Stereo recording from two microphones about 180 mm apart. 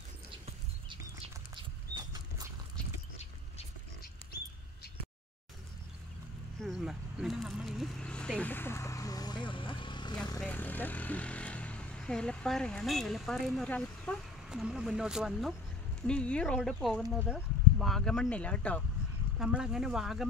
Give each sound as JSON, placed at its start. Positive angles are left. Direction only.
{"t": 0.3, "sound": "a sound", "side_deg": -30}
{"t": 6.6, "sound": "speech", "side_deg": 0}
{"t": 10.4, "sound": "speech", "side_deg": 10}